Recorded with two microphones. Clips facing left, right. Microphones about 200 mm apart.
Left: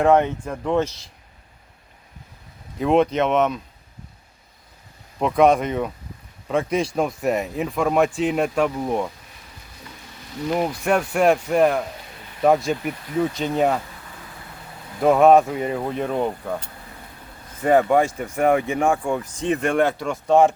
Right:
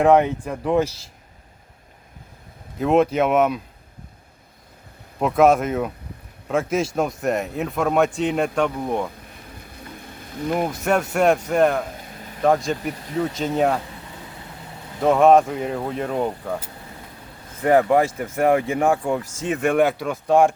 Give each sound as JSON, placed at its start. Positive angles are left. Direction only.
{"t": 0.0, "sound": "speech", "side_deg": -10}
{"t": 2.7, "sound": "speech", "side_deg": -5}
{"t": 5.2, "sound": "speech", "side_deg": -5}
{"t": 9.5, "sound": "a sound", "side_deg": -55}
{"t": 10.5, "sound": "speech", "side_deg": 0}
{"t": 15.0, "sound": "speech", "side_deg": 5}